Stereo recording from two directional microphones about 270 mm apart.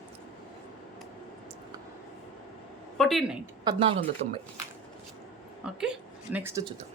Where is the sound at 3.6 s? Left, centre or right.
Centre.